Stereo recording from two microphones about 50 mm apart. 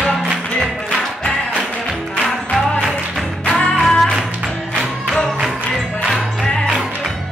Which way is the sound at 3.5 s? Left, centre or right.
Centre.